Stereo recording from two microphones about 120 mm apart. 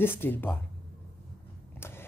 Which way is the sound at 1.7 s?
20° left (ahead or behind).